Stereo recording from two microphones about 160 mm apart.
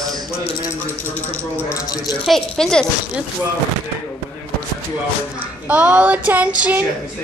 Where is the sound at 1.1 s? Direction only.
10° left (ahead or behind).